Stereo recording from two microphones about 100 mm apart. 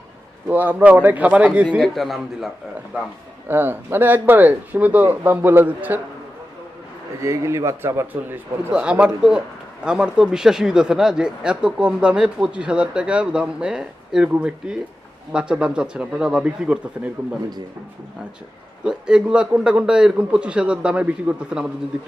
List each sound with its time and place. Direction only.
0.4 s speech: 20° right (ahead or behind)
1.8 s a man's voice: centre (ahead or behind)
3.5 s speech: 20° right (ahead or behind)
7.2 s speech: 30° right (ahead or behind)
8.7 s speech: 10° right (ahead or behind)
18.9 s speech: 10° right (ahead or behind)